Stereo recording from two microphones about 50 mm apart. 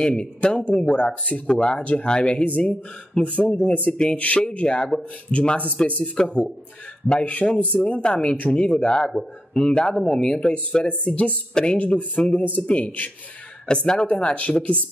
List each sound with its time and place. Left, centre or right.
0.2 s speech: left
13.7 s speech: centre